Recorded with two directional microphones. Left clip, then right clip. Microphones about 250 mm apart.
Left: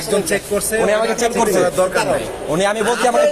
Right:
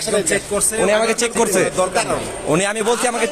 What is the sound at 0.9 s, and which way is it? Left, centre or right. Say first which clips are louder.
A man's voice: right 1 dB; right.